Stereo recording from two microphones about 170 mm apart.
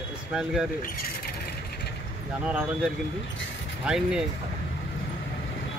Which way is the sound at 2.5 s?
5° right (ahead or behind).